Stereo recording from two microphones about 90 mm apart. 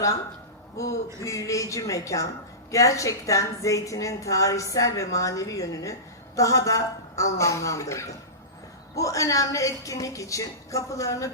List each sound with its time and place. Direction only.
1.2 s a woman's voice: 35° left (ahead or behind)